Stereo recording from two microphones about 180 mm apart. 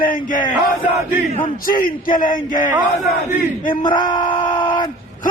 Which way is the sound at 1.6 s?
50° left (ahead or behind).